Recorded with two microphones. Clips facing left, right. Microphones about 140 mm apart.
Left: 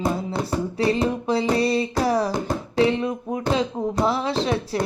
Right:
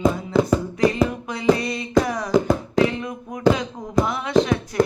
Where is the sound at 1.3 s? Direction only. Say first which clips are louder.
Left 3 dB; 30° left (ahead or behind).